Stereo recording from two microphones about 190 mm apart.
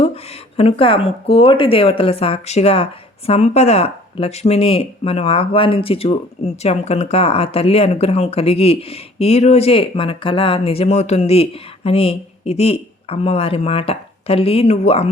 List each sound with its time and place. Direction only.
0.5 s speech: 30° left (ahead or behind)